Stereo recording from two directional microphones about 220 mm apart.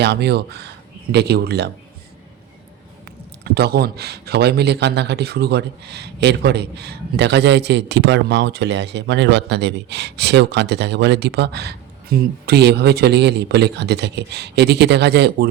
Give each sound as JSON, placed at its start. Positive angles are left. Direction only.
{"t": 0.0, "sound": "a man's voice", "side_deg": -50}
{"t": 3.4, "sound": "a man's voice", "side_deg": -45}